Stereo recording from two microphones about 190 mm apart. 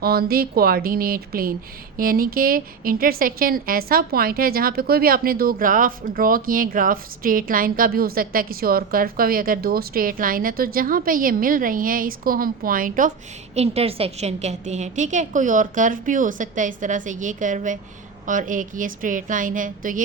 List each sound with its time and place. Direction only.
0.0 s a woman's voice: 55° right (ahead or behind)
13.6 s a woman's voice: 30° right (ahead or behind)